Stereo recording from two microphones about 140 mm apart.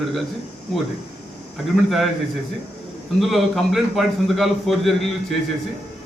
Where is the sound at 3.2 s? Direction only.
Centre (ahead or behind).